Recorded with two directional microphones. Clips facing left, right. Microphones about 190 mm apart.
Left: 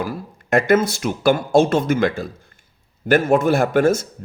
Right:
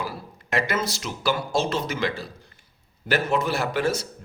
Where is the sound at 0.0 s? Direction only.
50° left (ahead or behind).